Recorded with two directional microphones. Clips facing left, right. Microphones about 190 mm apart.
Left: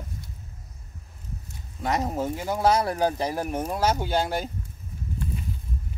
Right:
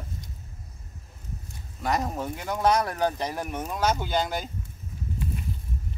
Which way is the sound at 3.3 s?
35° left (ahead or behind).